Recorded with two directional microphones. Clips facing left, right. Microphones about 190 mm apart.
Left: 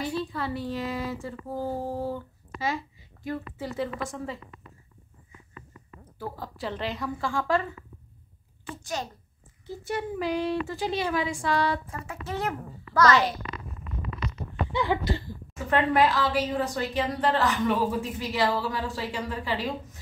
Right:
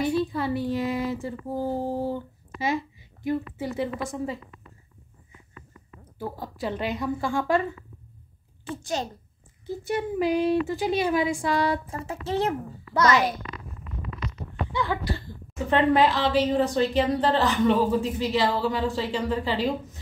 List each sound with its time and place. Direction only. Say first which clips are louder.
0.0 s a woman's voice: right 6 dB; 15° right (ahead or behind)
6.1 s a woman's voice: right 3 dB; 15° right (ahead or behind)
9.8 s speech: right 4 dB; 20° right (ahead or behind)
11.9 s a woman's voice: right 5 dB; 30° right (ahead or behind)
14.7 s a sound: left 2 dB; 20° left (ahead or behind)
15.7 s a woman's voice: right 2 dB; 25° right (ahead or behind)